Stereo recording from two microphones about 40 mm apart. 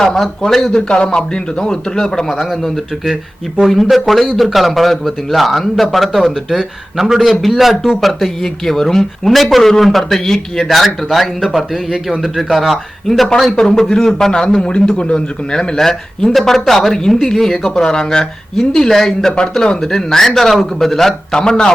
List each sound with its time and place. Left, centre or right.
0.0 s speech: centre
0.8 s speech: left
2.3 s speech: centre
3.8 s a man's voice: centre
13.6 s speech: centre
13.8 s a man's voice: centre
14.1 s speech: centre
21.1 s speech: centre